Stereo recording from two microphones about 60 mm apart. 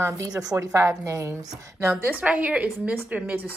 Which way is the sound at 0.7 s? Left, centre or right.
Right.